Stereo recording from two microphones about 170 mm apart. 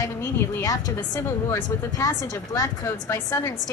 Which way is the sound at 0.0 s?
15° left (ahead or behind).